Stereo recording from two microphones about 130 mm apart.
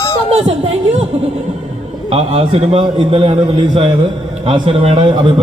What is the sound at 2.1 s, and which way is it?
A man's voice, 50° right (ahead or behind).